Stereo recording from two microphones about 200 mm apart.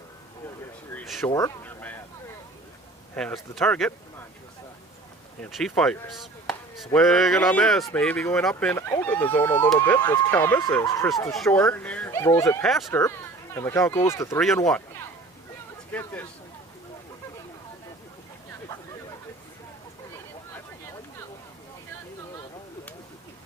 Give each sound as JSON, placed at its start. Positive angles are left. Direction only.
{"t": 0.9, "sound": "speech", "side_deg": 0}
{"t": 1.3, "sound": "a sound", "side_deg": 15}
{"t": 3.2, "sound": "speech", "side_deg": 0}
{"t": 5.4, "sound": "speech", "side_deg": 0}
{"t": 11.3, "sound": "speech", "side_deg": 0}
{"t": 12.9, "sound": "speech", "side_deg": 15}
{"t": 14.4, "sound": "speech", "side_deg": 5}
{"t": 15.9, "sound": "speech", "side_deg": 10}